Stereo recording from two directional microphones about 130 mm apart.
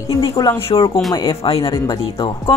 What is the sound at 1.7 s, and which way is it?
Speech, 30° left (ahead or behind).